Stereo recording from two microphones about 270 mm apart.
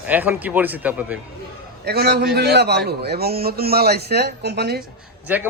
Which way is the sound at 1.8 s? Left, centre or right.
Right.